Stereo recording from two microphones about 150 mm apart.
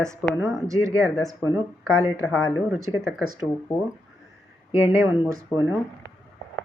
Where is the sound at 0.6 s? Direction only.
20° right (ahead or behind).